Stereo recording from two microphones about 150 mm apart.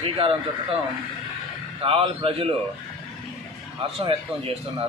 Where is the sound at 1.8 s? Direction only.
35° right (ahead or behind).